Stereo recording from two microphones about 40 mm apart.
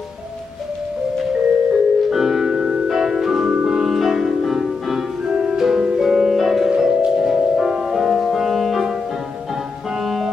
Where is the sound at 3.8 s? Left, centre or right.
Centre.